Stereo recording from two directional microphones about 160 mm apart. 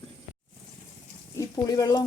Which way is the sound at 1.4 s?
20° left (ahead or behind).